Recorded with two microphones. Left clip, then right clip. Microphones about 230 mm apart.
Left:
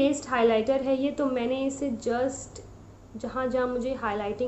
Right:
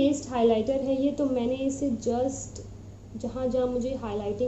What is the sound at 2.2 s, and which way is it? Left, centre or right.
Speech, left.